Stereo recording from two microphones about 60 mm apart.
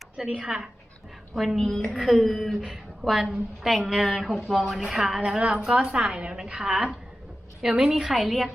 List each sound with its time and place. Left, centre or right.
0.2 s a woman's voice: centre
1.5 s a woman's voice: centre